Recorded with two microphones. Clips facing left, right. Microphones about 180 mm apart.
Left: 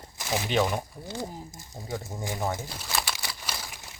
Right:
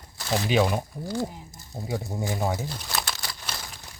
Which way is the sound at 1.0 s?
15° left (ahead or behind).